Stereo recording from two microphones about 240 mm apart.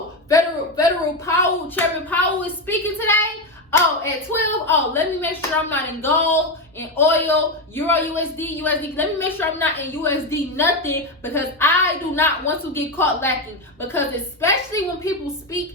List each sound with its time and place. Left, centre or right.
0.3 s a sound: centre
1.3 s a woman's voice: centre
14.4 s a woman's voice: centre